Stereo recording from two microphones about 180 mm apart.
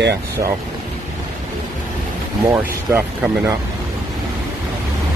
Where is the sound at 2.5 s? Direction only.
15° right (ahead or behind).